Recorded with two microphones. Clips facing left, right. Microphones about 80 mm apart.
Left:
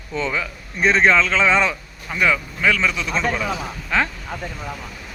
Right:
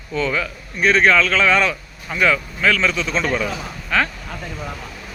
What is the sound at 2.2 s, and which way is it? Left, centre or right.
A man's voice, centre.